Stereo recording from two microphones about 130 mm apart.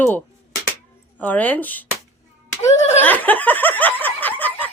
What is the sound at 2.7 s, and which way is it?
Speech, 60° left (ahead or behind).